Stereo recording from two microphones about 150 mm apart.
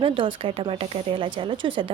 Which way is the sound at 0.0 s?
35° right (ahead or behind).